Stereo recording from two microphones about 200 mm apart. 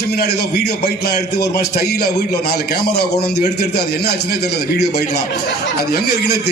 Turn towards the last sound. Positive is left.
turn(degrees=55)  # may be behind; listen again after turning